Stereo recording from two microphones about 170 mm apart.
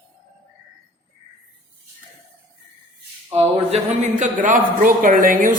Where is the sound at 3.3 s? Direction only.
35° right (ahead or behind); by 5.5 s 55° right (ahead or behind).